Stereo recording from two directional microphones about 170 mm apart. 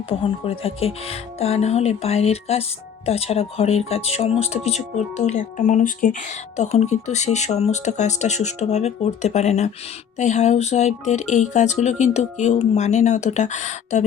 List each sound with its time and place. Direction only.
0.1 s speech: 35° left (ahead or behind)